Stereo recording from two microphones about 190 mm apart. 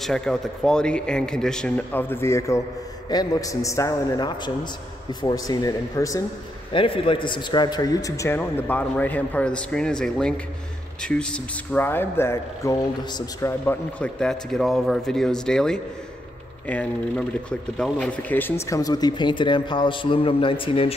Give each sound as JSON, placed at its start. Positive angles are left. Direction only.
{"t": 0.0, "sound": "a man's voice", "side_deg": 5}
{"t": 17.5, "sound": "speech", "side_deg": 5}